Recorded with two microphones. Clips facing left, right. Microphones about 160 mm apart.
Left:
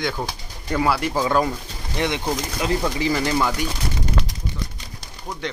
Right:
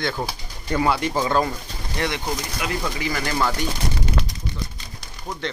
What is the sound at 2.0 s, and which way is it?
A man's voice, 20° left (ahead or behind).